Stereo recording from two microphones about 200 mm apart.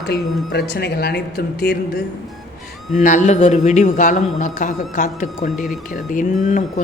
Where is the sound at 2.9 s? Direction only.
40° left (ahead or behind).